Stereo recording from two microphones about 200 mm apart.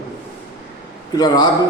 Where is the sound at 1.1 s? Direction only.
20° left (ahead or behind).